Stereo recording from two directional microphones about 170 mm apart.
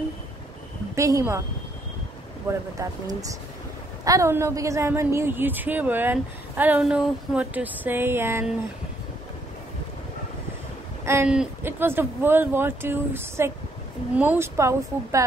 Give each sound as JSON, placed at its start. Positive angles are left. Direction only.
{"t": 0.9, "sound": "a woman's voice", "side_deg": -20}
{"t": 2.8, "sound": "a woman's voice", "side_deg": -20}
{"t": 11.2, "sound": "a woman's voice", "side_deg": -10}